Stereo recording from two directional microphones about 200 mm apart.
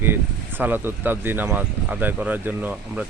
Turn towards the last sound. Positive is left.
turn(degrees=-10)  # may be behind; listen again after turning